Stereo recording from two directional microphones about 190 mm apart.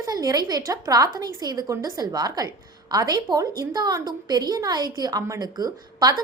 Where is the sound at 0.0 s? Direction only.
20° right (ahead or behind).